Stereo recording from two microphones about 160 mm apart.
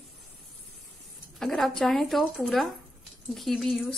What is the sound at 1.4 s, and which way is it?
Speech, 5° left (ahead or behind).